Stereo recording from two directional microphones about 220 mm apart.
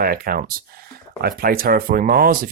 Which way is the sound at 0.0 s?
40° right (ahead or behind).